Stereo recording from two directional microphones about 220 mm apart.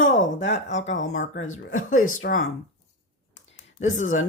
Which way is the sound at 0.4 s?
55° left (ahead or behind).